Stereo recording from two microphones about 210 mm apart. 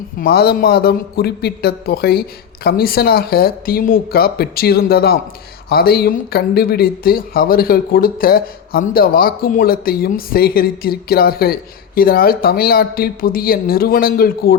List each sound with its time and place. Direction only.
0.2 s speech: 45° left (ahead or behind)